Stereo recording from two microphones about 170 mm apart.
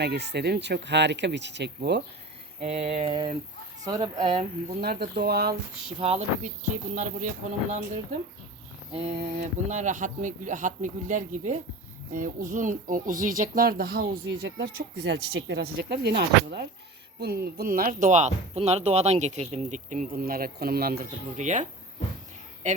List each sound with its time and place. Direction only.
0.0 s speech: 75° right (ahead or behind)
2.6 s a sound: 40° right (ahead or behind)
3.8 s speech: 25° right (ahead or behind)
4.8 s speech: 70° right (ahead or behind)
6.0 s a sound: 40° right (ahead or behind)
6.9 s speech: 45° right (ahead or behind); by 21.1 s 65° right (ahead or behind)
21.3 s speech: 45° right (ahead or behind)